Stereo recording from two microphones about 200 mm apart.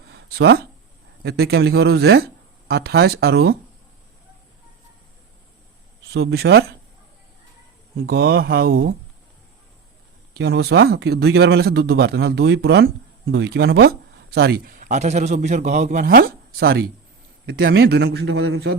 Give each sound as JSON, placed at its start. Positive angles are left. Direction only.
{"t": 0.1, "sound": "a sound", "side_deg": -55}
{"t": 1.2, "sound": "speech", "side_deg": -55}
{"t": 6.1, "sound": "speech", "side_deg": -55}
{"t": 7.9, "sound": "speech", "side_deg": -50}
{"t": 10.3, "sound": "a man's voice", "side_deg": -55}